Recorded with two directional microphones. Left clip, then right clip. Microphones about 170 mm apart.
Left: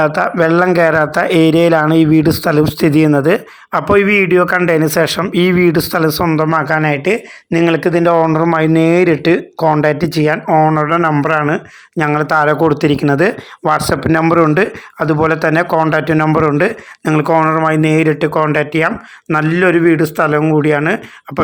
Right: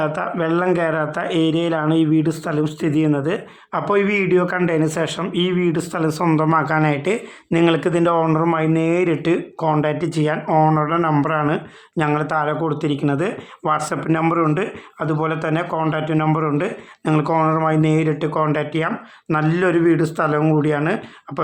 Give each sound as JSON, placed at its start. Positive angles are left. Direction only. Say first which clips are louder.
{"t": 0.0, "sound": "speech", "louder": "left 9 dB", "side_deg": 30}
{"t": 8.5, "sound": "speech", "louder": "left 7 dB", "side_deg": 35}